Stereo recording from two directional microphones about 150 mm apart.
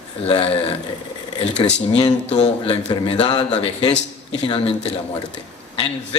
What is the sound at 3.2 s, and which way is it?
A man's voice, 30° left (ahead or behind).